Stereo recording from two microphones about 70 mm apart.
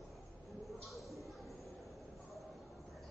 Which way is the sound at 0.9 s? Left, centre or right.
Centre.